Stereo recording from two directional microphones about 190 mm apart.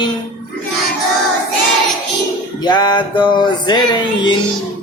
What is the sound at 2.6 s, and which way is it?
Speech, 20° left (ahead or behind).